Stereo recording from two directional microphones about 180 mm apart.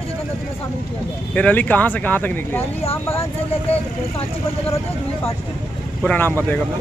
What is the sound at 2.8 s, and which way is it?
Speech, 35° left (ahead or behind).